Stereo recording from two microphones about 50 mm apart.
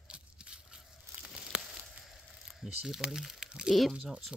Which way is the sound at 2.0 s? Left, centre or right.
Centre.